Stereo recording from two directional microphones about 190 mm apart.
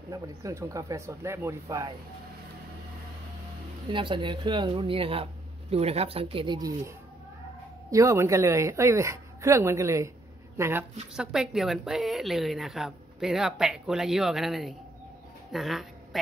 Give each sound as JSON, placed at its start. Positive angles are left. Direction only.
{"t": 0.1, "sound": "speech", "side_deg": -15}
{"t": 3.9, "sound": "speech", "side_deg": -25}
{"t": 7.9, "sound": "a woman's voice", "side_deg": -15}